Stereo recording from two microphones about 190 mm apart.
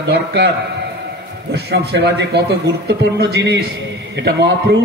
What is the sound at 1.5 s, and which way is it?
A man's voice, 60° right (ahead or behind).